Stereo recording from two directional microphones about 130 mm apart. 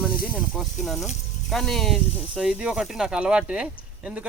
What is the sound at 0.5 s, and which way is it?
Speech, centre (ahead or behind).